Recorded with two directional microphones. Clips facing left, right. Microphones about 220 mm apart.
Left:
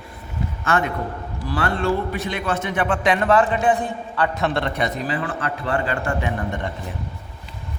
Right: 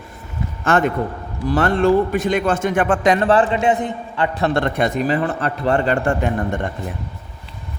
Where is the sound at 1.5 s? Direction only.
45° right (ahead or behind); by 4.3 s 20° right (ahead or behind).